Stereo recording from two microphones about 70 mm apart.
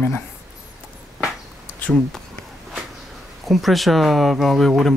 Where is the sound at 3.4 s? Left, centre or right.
Centre.